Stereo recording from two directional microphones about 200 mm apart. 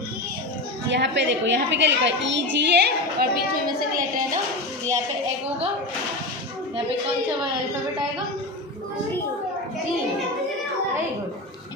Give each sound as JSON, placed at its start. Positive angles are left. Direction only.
{"t": 0.9, "sound": "a woman's voice", "side_deg": -60}